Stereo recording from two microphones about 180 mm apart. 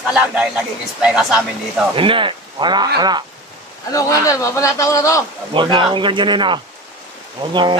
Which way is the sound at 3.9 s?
20° left (ahead or behind).